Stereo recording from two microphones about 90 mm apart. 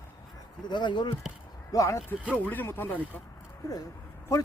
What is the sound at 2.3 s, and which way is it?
Speech, 20° left (ahead or behind).